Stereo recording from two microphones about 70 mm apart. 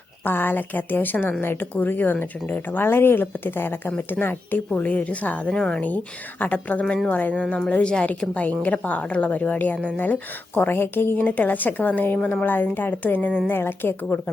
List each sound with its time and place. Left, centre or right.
0.3 s a woman's voice: left